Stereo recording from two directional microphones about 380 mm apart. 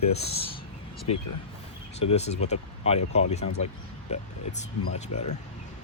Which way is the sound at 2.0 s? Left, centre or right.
Centre.